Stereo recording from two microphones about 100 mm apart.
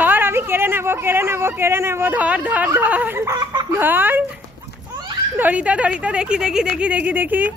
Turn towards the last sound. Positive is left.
turn(degrees=-15)  # may be behind; listen again after turning